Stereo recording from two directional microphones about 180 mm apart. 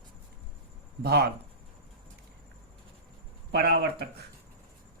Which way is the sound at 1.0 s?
60° right (ahead or behind).